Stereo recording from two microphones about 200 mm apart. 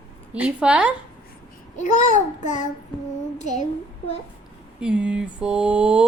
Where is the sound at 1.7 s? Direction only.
40° left (ahead or behind).